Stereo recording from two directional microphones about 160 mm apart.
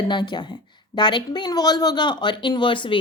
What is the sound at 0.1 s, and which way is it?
A woman's voice, 30° left (ahead or behind).